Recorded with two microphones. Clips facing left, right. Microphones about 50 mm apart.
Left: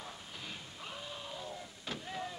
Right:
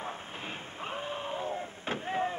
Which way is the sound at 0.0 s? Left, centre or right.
Right.